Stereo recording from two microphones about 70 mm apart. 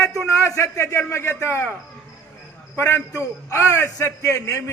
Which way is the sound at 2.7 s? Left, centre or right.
Left.